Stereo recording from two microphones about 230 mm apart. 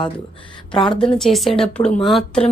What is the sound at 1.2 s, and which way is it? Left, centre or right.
Speech, centre.